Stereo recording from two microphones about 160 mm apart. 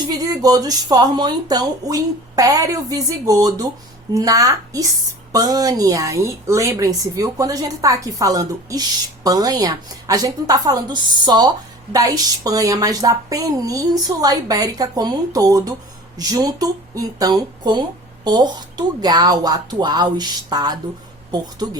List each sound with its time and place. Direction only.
0.1 s a woman's voice: 25° right (ahead or behind)